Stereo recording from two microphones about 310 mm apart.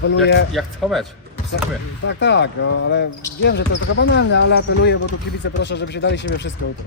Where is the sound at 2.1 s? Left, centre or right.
Left.